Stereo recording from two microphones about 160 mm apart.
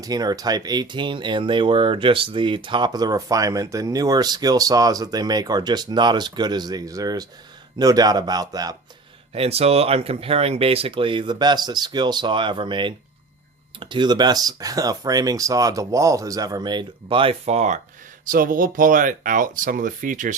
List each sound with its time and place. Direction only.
0.0 s speech: 25° right (ahead or behind)
9.3 s speech: 40° right (ahead or behind)
18.3 s speech: 60° right (ahead or behind)